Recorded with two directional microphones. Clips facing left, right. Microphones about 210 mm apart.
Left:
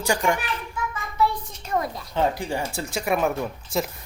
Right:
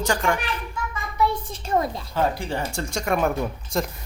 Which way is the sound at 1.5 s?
30° right (ahead or behind).